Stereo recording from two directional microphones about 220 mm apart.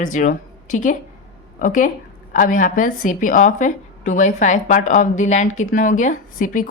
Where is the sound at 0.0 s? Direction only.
35° left (ahead or behind).